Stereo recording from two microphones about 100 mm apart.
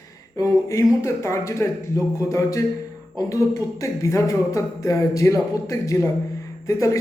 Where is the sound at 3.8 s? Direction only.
30° left (ahead or behind).